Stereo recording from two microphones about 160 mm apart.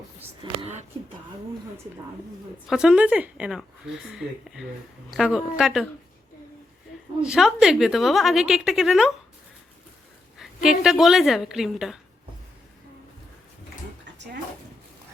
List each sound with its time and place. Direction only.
0.6 s speech: 45° right (ahead or behind)
2.6 s speech: 5° right (ahead or behind)
7.3 s speech: 5° right (ahead or behind)
10.3 s speech: 5° right (ahead or behind)